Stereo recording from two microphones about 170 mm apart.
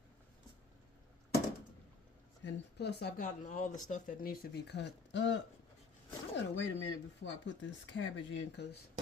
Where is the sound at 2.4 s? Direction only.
80° left.